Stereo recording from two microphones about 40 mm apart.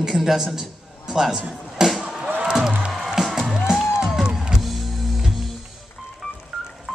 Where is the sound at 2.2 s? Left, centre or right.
Right.